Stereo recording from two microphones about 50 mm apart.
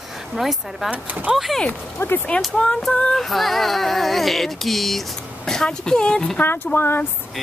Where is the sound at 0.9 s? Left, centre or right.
Right.